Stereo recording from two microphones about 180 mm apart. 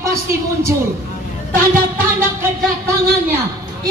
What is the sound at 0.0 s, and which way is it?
Speech, 15° right (ahead or behind).